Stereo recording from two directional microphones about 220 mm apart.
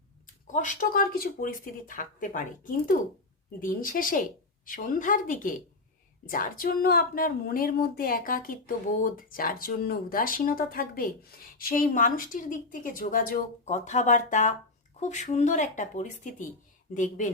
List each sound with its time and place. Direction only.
0.4 s speech: 35° left (ahead or behind)